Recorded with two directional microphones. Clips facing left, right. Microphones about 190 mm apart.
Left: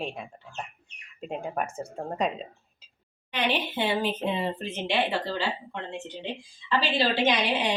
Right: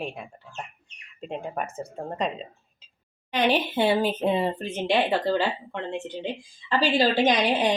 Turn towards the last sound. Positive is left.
turn(degrees=-45)  # may be behind; listen again after turning